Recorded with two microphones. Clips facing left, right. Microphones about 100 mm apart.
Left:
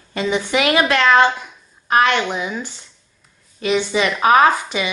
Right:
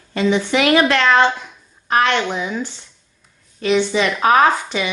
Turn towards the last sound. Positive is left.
turn(degrees=10)  # may be behind; listen again after turning